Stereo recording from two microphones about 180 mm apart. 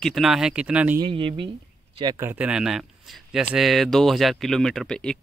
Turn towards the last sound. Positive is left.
turn(degrees=5)  # may be behind; listen again after turning